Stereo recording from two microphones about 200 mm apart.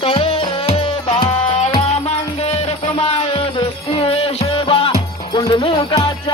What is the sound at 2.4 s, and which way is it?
Music, 35° left (ahead or behind).